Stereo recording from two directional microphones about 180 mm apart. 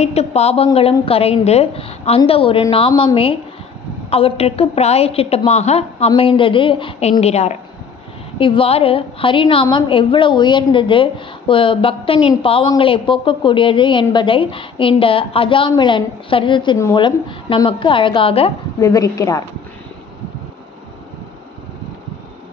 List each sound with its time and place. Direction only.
0.0 s a woman's voice: 35° left (ahead or behind)
2.9 s a woman's voice: 20° left (ahead or behind)
4.1 s a woman's voice: 35° left (ahead or behind)
18.8 s speech: 20° left (ahead or behind)